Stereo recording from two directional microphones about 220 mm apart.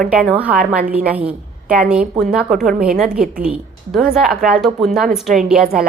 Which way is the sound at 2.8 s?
5° right (ahead or behind).